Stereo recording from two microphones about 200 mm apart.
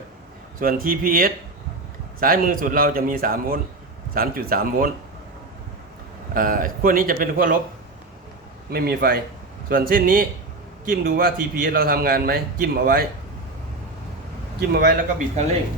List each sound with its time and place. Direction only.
0.6 s a man's voice: 45° right (ahead or behind)
6.3 s a man's voice: 45° right (ahead or behind)
8.7 s a man's voice: 50° right (ahead or behind)
14.7 s a man's voice: 55° right (ahead or behind)